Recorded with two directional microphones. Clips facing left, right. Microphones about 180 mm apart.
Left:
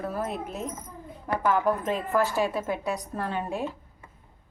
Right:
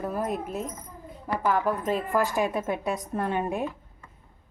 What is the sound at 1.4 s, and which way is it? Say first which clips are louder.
Speech: left 1 dB; 5° right (ahead or behind).